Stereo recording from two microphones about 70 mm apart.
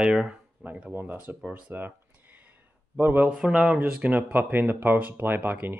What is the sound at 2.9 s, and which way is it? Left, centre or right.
Speech, right.